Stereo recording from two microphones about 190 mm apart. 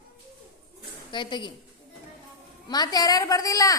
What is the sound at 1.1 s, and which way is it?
Speech, 25° left (ahead or behind).